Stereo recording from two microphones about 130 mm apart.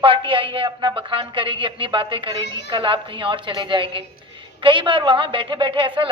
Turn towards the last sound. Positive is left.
turn(degrees=-40)  # may be behind; listen again after turning